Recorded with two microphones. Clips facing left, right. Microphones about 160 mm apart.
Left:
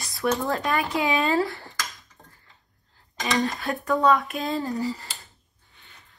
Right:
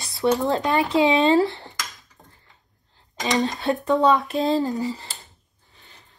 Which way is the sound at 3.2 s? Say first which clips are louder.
Right 3 dB; 20° right (ahead or behind).